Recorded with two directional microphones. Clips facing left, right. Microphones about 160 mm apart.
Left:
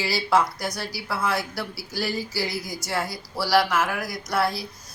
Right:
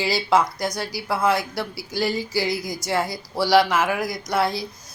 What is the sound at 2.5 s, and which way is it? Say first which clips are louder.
Speech: right 5 dB; 5° left (ahead or behind).